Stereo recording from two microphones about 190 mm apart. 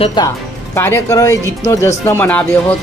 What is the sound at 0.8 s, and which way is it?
A woman's voice, 15° left (ahead or behind).